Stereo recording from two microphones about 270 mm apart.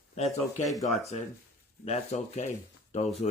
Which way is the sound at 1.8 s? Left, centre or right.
Left.